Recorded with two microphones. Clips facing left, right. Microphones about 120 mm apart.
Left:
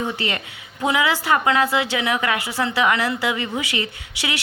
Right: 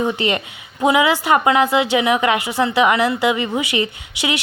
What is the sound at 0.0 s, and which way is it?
A woman's voice, 20° right (ahead or behind).